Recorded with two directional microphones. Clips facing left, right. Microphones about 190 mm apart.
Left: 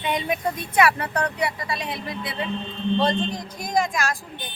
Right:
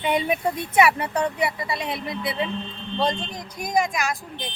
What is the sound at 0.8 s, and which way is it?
Speech, 25° right (ahead or behind).